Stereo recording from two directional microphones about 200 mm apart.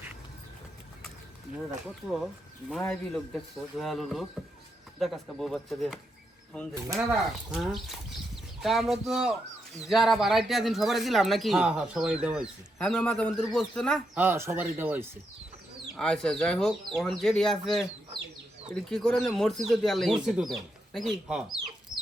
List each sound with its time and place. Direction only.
2.0 s speech: centre (ahead or behind)
6.7 s speech: 15° right (ahead or behind)
7.5 s speech: centre (ahead or behind)
14.2 s speech: 10° right (ahead or behind)
16.0 s speech: 5° left (ahead or behind)
18.9 s speech: 5° left (ahead or behind)
21.9 s chicken: 20° right (ahead or behind)